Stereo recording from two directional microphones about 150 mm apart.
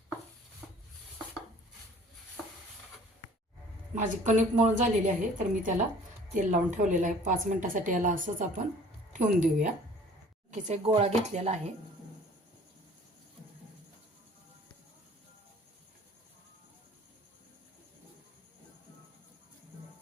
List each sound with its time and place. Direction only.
3.9 s a woman's voice: 55° right (ahead or behind)
10.5 s a woman's voice: 50° right (ahead or behind)